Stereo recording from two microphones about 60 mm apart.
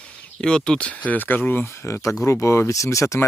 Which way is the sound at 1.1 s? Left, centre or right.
Left.